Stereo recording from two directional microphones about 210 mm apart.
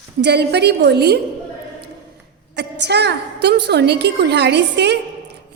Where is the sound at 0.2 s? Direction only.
50° right (ahead or behind).